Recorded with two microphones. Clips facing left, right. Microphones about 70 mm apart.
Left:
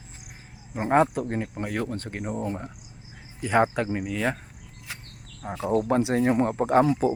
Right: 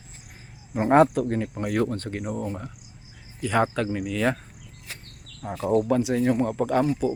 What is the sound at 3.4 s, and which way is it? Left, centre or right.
Speech, left.